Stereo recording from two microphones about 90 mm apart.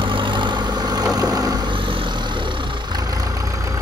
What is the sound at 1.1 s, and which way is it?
Vehicle, 45° right (ahead or behind).